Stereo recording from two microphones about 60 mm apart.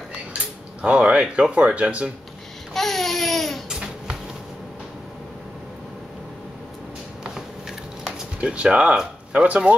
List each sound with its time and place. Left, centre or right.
0.8 s speech: centre
2.7 s a sound: centre
3.6 s babbling: centre
8.0 s speech: centre